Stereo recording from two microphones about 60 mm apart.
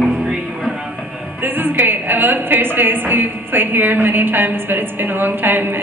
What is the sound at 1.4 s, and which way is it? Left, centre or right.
A woman's voice, right.